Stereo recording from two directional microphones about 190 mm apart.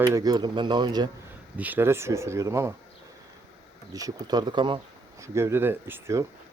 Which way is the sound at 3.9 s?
20° right (ahead or behind).